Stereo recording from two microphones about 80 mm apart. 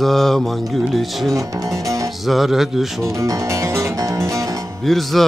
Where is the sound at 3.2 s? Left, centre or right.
Right.